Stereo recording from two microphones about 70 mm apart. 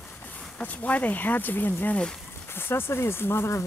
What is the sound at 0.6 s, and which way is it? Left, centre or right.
Speech, left.